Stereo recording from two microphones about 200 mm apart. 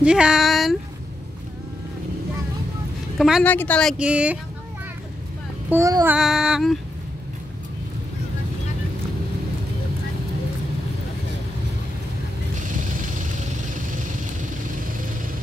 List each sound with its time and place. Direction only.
0.0 s speech: 5° right (ahead or behind)
3.2 s a woman's voice: centre (ahead or behind)
4.0 s child singing: 5° right (ahead or behind)
5.7 s child singing: 15° right (ahead or behind)
6.1 s child singing: 5° right (ahead or behind)
12.5 s vehicle: 40° right (ahead or behind)
14.4 s vehicle: 45° right (ahead or behind)